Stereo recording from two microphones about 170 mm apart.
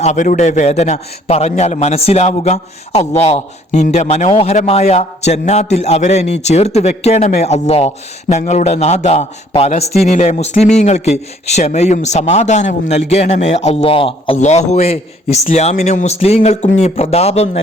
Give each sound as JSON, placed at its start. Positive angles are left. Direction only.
{"t": 0.0, "sound": "a man's voice", "side_deg": 45}